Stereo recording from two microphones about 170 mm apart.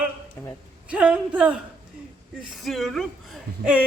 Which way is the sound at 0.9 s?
5° right (ahead or behind).